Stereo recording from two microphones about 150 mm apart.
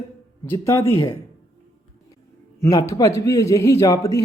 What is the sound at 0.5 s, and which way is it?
Speech, 20° left (ahead or behind).